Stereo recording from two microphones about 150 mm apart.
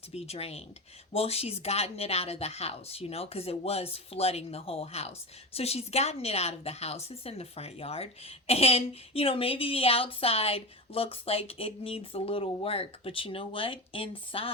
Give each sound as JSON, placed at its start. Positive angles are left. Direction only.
{"t": 0.1, "sound": "a woman's voice", "side_deg": 45}